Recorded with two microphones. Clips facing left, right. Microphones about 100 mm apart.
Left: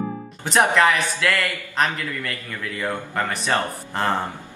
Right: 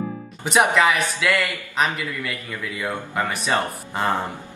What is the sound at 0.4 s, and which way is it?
Speech, 5° right (ahead or behind).